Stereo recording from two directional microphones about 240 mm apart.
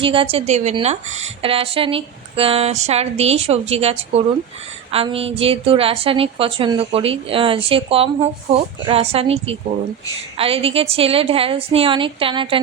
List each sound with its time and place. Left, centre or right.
0.0 s a woman's voice: right